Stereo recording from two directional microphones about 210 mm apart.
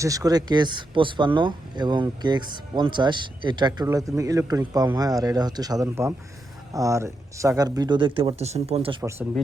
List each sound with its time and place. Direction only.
0.0 s speech: 15° right (ahead or behind)